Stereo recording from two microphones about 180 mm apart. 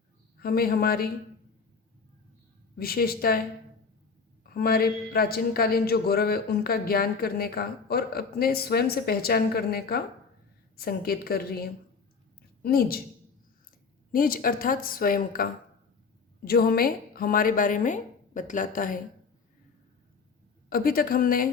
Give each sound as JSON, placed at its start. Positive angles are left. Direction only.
{"t": 0.3, "sound": "speech", "side_deg": 55}
{"t": 2.7, "sound": "speech", "side_deg": 55}
{"t": 4.4, "sound": "speech", "side_deg": 55}
{"t": 14.1, "sound": "a woman's voice", "side_deg": 50}
{"t": 20.7, "sound": "a woman's voice", "side_deg": 55}